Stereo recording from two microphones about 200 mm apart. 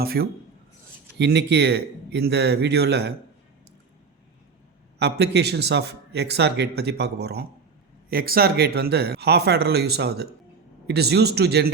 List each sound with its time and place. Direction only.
0.0 s a man's voice: 50° right (ahead or behind)
4.9 s a man's voice: 55° right (ahead or behind)